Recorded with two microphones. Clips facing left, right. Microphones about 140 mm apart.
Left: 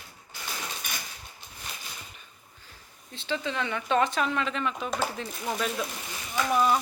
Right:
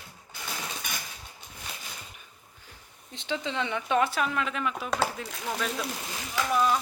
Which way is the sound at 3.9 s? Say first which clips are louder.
Left 1 dB; 5° right (ahead or behind).